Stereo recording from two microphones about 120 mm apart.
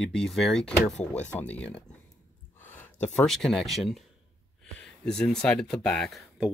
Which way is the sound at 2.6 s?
15° left (ahead or behind).